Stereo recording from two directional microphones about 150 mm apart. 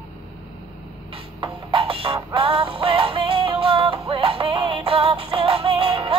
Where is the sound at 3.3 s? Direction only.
40° right (ahead or behind).